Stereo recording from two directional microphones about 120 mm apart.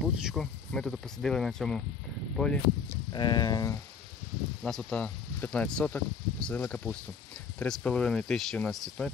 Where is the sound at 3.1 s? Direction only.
35° left (ahead or behind).